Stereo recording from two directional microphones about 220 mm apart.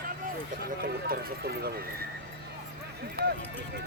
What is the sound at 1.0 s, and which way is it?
Speech, 45° right (ahead or behind).